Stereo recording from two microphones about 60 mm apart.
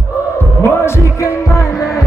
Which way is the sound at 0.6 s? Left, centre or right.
Left.